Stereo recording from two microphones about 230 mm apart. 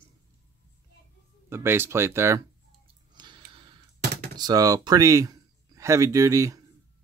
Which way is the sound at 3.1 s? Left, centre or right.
Centre.